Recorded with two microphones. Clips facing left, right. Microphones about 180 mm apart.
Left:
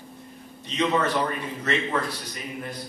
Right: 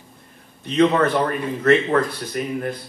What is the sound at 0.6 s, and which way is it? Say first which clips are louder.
A man's voice: right 7 dB; 55° right (ahead or behind).